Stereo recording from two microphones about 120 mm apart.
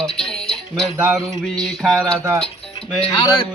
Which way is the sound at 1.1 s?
5° left (ahead or behind).